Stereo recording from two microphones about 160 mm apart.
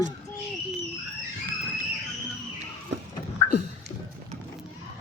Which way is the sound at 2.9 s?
90° right.